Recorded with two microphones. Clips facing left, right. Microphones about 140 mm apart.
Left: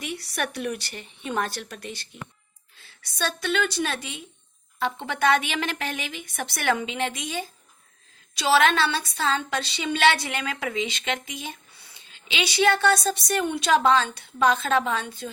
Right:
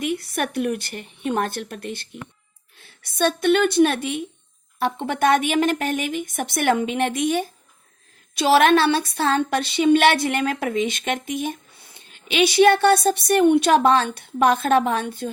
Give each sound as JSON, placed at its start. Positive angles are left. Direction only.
{"t": 0.0, "sound": "a woman's voice", "side_deg": -50}